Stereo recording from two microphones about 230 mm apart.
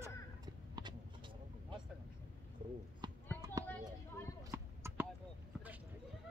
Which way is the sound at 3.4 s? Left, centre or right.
Centre.